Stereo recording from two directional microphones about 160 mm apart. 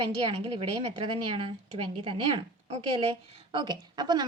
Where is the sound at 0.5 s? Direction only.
40° right (ahead or behind).